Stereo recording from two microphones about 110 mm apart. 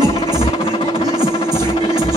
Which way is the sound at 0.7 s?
55° left (ahead or behind).